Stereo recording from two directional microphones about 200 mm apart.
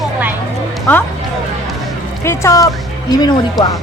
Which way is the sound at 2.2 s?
15° left (ahead or behind).